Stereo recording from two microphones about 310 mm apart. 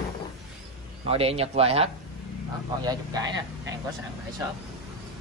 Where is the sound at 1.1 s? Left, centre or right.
Centre.